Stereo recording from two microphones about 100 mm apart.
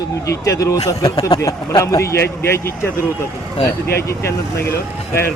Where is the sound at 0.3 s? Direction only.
35° left (ahead or behind).